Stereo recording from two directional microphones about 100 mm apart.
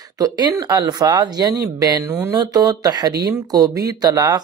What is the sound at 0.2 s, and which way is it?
Speech, 40° right (ahead or behind).